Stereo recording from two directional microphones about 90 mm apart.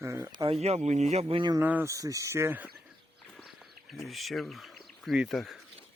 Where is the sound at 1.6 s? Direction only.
20° right (ahead or behind).